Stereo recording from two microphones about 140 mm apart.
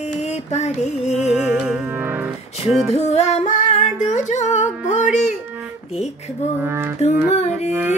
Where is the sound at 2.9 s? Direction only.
55° left (ahead or behind).